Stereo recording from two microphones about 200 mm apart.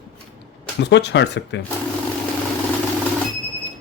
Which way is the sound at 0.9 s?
60° left (ahead or behind).